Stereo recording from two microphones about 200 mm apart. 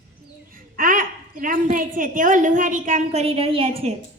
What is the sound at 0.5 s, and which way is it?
A woman's voice, 45° right (ahead or behind).